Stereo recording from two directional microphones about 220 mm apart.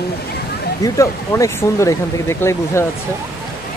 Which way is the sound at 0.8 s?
15° left (ahead or behind).